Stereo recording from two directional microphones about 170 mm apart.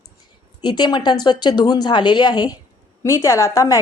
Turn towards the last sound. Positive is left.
turn(degrees=15)  # may be behind; listen again after turning